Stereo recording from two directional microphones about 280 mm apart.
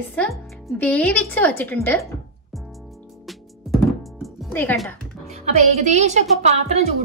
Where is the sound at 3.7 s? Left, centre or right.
Centre.